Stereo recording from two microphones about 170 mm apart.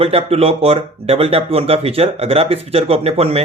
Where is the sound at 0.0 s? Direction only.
35° right (ahead or behind).